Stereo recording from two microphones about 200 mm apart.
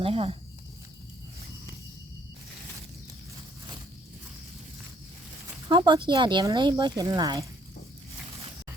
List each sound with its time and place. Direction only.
0.0 s speech: 30° right (ahead or behind)
5.6 s speech: 20° right (ahead or behind)